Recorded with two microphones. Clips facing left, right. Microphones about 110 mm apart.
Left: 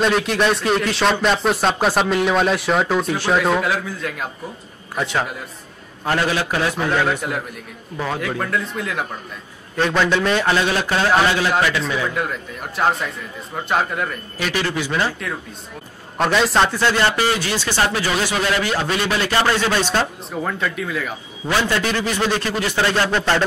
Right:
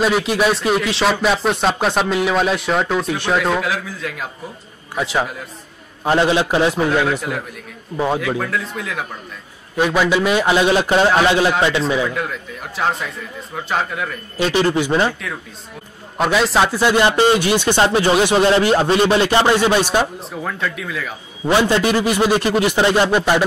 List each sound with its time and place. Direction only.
0.0 s speech: 5° right (ahead or behind)
6.0 s speech: 20° right (ahead or behind)
6.9 s a man's voice: centre (ahead or behind); by 12.1 s 20° right (ahead or behind)
12.1 s speech: centre (ahead or behind)
14.4 s speech: 25° right (ahead or behind)
16.2 s speech: 5° right (ahead or behind)
20.2 s speech: centre (ahead or behind)
21.5 s a man's voice: 20° right (ahead or behind)